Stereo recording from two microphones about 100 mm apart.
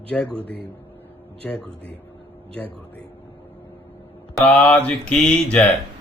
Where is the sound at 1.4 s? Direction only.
5° left (ahead or behind).